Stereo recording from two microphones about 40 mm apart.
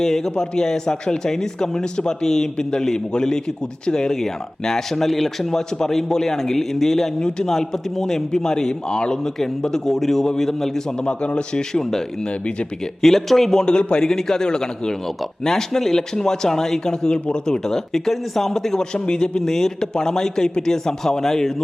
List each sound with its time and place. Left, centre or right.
0.0 s speech: centre
11.0 s a man's voice: left
11.8 s speech: centre
12.2 s a man's voice: left
13.0 s speech: centre
13.6 s speech: left